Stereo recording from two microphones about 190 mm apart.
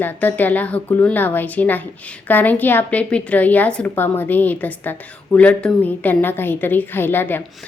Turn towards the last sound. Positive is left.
turn(degrees=10)  # may be behind; listen again after turning